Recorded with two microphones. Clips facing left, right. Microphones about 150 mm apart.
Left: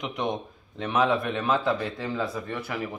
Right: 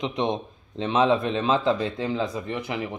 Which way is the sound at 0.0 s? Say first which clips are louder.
Right 4 dB; 25° right (ahead or behind).